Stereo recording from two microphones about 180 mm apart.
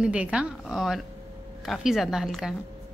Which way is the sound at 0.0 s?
5° right (ahead or behind).